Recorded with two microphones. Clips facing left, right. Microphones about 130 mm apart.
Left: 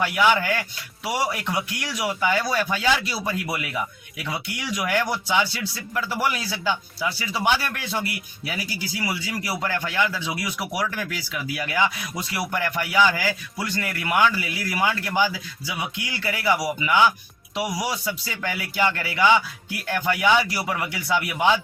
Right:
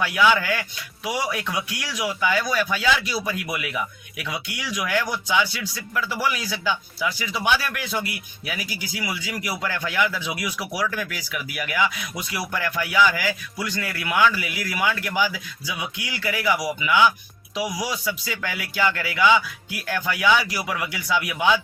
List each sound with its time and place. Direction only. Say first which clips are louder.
0.0 s speech: even; 20° left (ahead or behind)
9.4 s speech: even; 25° left (ahead or behind)
11.6 s speech: even; 25° left (ahead or behind)